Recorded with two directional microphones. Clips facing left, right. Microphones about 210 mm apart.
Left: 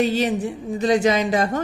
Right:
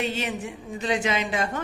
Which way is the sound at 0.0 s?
35° left (ahead or behind).